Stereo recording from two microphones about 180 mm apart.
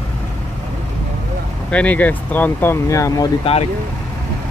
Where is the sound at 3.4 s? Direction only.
35° left (ahead or behind).